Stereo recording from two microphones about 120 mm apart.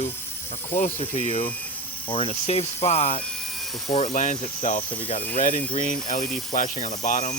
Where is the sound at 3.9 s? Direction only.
70° left (ahead or behind).